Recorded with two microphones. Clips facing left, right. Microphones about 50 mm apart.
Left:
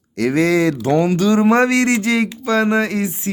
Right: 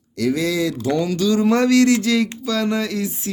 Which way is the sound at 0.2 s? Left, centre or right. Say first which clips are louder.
Left 5 dB; left.